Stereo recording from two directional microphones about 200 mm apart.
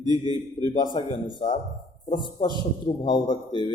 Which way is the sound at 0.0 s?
20° right (ahead or behind).